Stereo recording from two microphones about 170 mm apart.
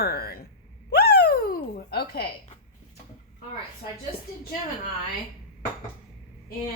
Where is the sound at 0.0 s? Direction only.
65° left (ahead or behind).